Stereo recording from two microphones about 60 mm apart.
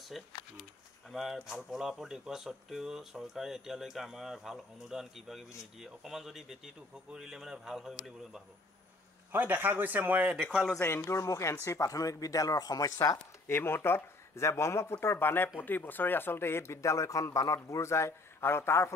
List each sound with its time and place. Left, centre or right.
0.2 s speech: centre
9.3 s speech: right
11.1 s speech: left
13.5 s speech: left
15.0 s speech: left
17.6 s speech: left